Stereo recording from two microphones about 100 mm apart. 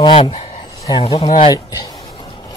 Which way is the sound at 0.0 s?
60° left (ahead or behind).